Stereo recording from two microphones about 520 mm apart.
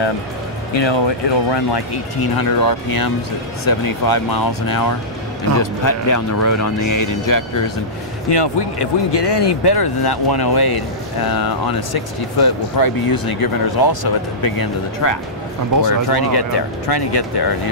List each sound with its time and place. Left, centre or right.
0.7 s speech: left
8.3 s speech: left